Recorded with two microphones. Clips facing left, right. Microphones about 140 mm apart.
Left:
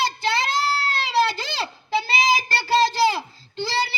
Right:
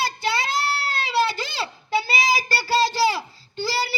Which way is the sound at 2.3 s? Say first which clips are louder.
Left 3 dB; 20° left (ahead or behind).